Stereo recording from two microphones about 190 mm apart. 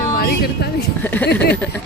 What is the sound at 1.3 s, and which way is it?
Speech, 60° left (ahead or behind).